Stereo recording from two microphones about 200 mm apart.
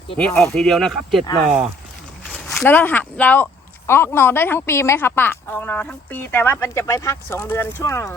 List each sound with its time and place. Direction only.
0.2 s speech: 5° left (ahead or behind)
2.2 s speech: 5° left (ahead or behind)